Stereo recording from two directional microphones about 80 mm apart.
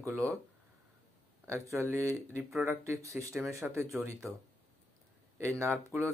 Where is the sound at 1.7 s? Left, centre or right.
Right.